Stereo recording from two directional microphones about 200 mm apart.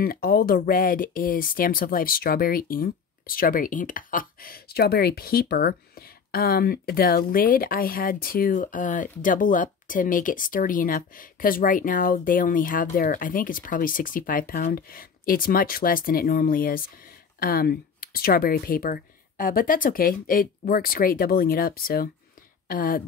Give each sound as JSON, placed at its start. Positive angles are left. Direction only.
{"t": 0.0, "sound": "speech", "side_deg": 50}